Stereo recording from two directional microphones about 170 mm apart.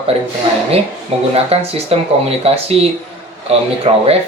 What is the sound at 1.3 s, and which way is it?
Speech, 35° right (ahead or behind).